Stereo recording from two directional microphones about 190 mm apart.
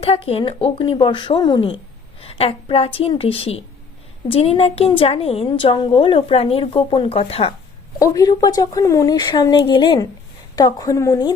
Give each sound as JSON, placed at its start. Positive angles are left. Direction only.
{"t": 0.0, "sound": "a woman's voice", "side_deg": 30}
{"t": 7.9, "sound": "a woman's voice", "side_deg": 15}